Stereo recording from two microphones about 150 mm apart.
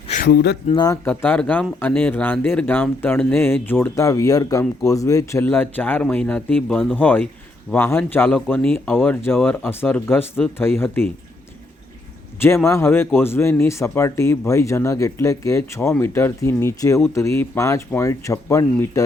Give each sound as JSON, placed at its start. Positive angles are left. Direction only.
{"t": 0.2, "sound": "speech", "side_deg": 90}
{"t": 0.7, "sound": "speech", "side_deg": 30}
{"t": 1.0, "sound": "speech", "side_deg": 10}
{"t": 12.4, "sound": "speech", "side_deg": 20}